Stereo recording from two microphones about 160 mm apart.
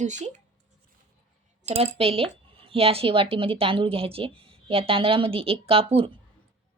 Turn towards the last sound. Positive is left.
turn(degrees=-35)  # may be behind; listen again after turning